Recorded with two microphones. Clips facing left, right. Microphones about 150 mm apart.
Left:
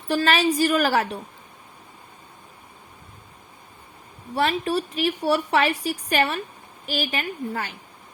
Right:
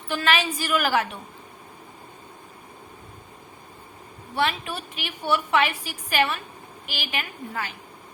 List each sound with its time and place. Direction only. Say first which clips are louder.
0.1 s a woman's voice: left 4 dB; 35° left (ahead or behind)
4.4 s a woman's voice: left 4 dB; 35° left (ahead or behind)